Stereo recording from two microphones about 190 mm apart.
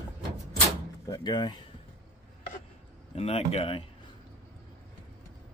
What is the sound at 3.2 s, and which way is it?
Speech, 30° left (ahead or behind).